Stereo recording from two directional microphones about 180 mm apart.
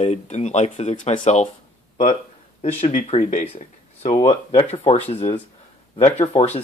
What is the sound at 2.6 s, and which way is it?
Speech, 35° left (ahead or behind).